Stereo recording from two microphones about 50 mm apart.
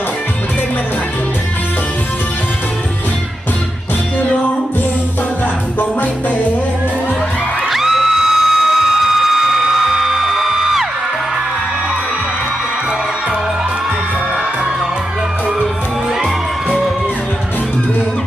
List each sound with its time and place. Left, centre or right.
5.8 s music: left
7.7 s music: centre
9.9 s music: centre
16.2 s music: centre